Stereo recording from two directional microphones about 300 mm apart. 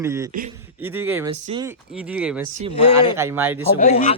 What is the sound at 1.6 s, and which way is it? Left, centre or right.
Speech, centre.